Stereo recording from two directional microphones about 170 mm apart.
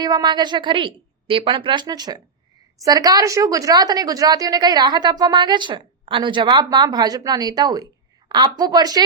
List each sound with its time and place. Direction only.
0.0 s a woman's voice: 25° right (ahead or behind)